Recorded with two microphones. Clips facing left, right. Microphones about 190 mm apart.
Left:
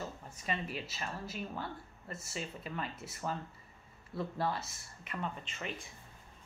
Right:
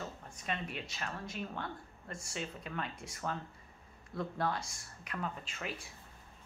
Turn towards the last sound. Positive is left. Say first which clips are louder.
# even
turn(degrees=0)  # may be behind; listen again after turning